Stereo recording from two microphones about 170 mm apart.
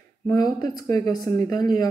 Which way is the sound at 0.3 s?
25° left (ahead or behind).